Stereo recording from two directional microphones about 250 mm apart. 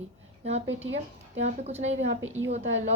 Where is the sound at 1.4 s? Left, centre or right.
Right.